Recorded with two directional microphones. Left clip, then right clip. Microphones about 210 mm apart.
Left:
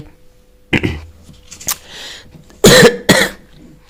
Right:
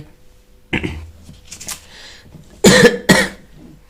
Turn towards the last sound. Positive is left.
turn(degrees=40)  # may be behind; listen again after turning